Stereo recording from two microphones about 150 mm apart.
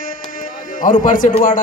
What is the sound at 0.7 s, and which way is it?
Speech, 60° left (ahead or behind).